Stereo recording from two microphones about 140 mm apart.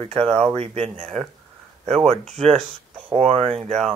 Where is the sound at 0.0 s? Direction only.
45° right (ahead or behind).